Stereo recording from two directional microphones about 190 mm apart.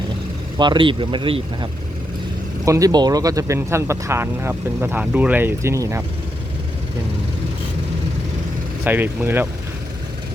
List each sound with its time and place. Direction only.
0.6 s speech: 25° right (ahead or behind)
2.6 s speech: 20° right (ahead or behind)
8.8 s speech: 10° right (ahead or behind)